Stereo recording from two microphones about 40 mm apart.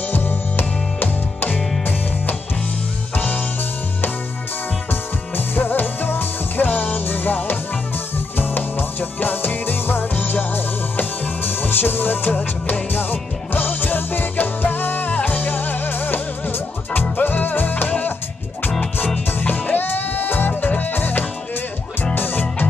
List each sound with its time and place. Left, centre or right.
0.1 s music: left
5.5 s music: left
6.7 s music: left
7.1 s music: left
19.4 s music: left